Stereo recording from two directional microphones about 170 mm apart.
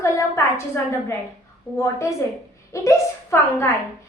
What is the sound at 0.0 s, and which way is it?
A woman's voice, 15° left (ahead or behind).